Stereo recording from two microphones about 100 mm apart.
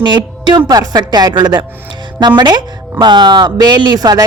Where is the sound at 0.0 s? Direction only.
50° right (ahead or behind).